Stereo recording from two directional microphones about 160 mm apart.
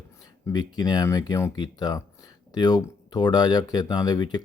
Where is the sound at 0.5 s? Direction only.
25° left (ahead or behind).